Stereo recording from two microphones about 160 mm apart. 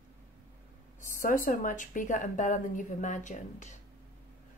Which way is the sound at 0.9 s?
55° left (ahead or behind).